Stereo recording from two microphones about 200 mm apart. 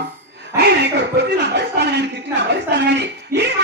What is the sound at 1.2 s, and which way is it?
A woman's voice, 55° right (ahead or behind).